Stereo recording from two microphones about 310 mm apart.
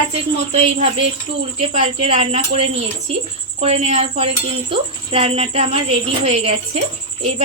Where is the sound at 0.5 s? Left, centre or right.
Centre.